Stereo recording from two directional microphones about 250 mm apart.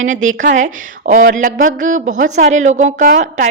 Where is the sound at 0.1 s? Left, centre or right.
Right.